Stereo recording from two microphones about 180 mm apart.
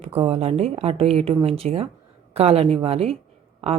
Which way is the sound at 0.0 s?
30° right (ahead or behind).